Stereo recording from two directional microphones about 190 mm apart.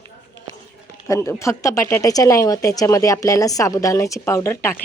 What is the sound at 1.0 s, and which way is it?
A woman's voice, 15° left (ahead or behind).